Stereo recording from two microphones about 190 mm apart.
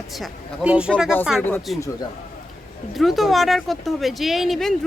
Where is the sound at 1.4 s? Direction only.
10° left (ahead or behind).